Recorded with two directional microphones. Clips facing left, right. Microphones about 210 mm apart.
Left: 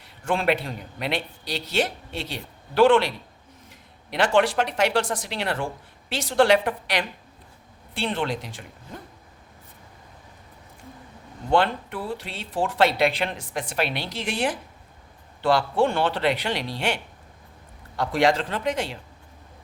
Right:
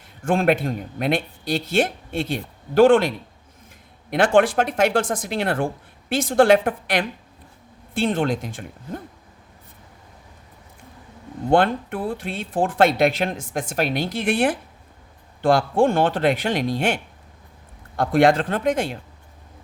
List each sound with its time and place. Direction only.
0.3 s speech: 50° right (ahead or behind)
11.5 s speech: 50° right (ahead or behind)